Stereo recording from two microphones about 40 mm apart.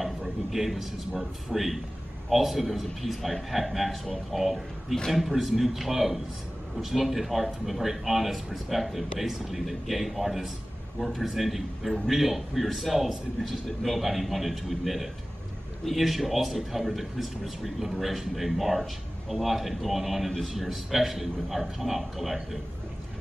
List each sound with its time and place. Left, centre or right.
0.0 s a man's voice: centre